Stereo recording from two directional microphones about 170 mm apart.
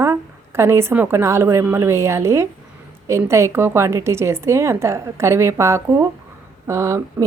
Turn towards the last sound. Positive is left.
turn(degrees=-15)  # may be behind; listen again after turning